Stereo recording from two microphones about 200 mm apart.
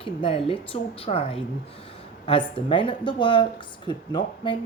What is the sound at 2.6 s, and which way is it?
A woman's voice, 25° left (ahead or behind).